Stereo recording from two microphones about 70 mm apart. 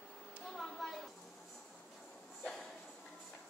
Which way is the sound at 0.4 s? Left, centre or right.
Centre.